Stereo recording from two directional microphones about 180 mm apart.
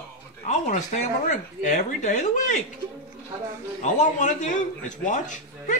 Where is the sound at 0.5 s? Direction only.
40° left (ahead or behind).